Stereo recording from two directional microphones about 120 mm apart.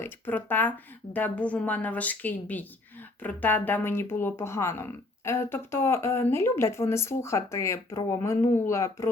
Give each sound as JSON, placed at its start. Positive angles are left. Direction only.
{"t": 0.0, "sound": "a woman's voice", "side_deg": 15}